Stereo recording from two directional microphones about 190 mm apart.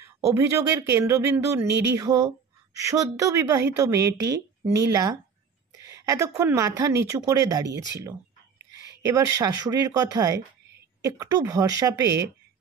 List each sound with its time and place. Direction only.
0.0 s speech: 15° right (ahead or behind)
1.7 s music: 60° right (ahead or behind)
2.0 s a woman's voice: 20° right (ahead or behind)
9.0 s speech: 15° right (ahead or behind)